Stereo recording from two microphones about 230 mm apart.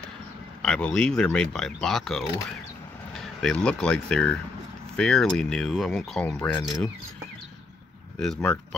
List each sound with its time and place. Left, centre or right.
0.6 s speech: centre
8.2 s speech: centre